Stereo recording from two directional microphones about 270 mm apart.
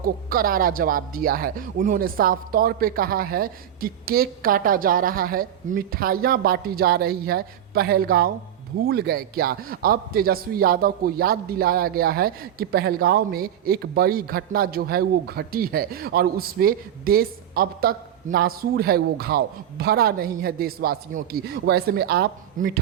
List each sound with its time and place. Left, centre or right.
0.0 s a man's voice: right